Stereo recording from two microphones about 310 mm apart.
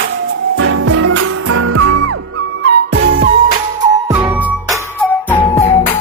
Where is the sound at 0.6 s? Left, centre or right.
Right.